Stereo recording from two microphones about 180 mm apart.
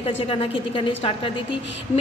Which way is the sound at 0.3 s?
30° left (ahead or behind).